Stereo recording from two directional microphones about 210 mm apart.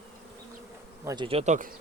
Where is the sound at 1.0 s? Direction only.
20° right (ahead or behind).